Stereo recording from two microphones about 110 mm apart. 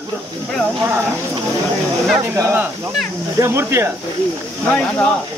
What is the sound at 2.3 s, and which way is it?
Speech, 20° right (ahead or behind).